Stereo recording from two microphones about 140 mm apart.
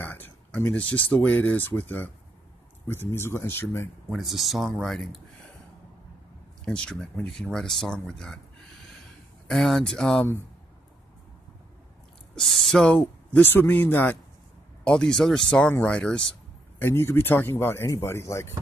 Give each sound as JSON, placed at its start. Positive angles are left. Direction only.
{"t": 0.0, "sound": "speech", "side_deg": 10}
{"t": 4.1, "sound": "speech", "side_deg": 0}
{"t": 6.6, "sound": "speech", "side_deg": 5}
{"t": 12.4, "sound": "speech", "side_deg": 0}